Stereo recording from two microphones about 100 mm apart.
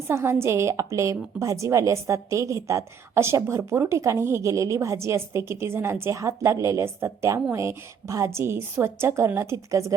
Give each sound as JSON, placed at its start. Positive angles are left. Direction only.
{"t": 0.1, "sound": "a woman's voice", "side_deg": -25}